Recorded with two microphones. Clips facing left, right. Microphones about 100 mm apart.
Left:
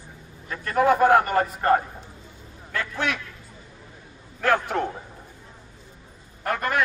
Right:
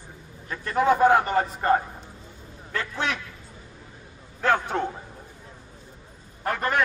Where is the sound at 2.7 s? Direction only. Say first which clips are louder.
Left 1 dB; 30° right (ahead or behind).